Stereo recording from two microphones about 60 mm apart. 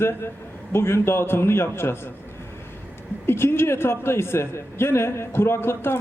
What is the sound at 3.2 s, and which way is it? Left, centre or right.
A man's voice, left.